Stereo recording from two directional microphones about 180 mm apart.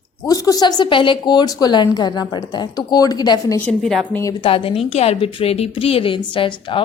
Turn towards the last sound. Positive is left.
turn(degrees=30)  # may be behind; listen again after turning